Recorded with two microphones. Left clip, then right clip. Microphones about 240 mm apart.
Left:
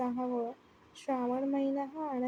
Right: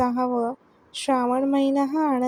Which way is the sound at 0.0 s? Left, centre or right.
Right.